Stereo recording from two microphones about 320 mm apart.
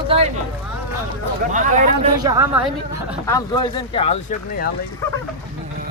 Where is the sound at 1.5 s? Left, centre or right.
Right.